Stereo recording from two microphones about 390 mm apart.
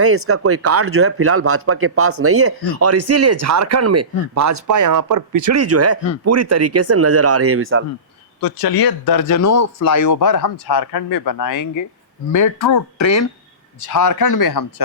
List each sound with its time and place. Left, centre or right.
0.0 s speech: right
8.4 s speech: left
10.7 s speech: left
14.5 s speech: left